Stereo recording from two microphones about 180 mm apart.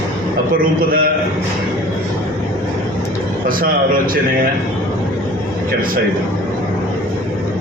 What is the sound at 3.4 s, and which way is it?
Speech, 50° right (ahead or behind).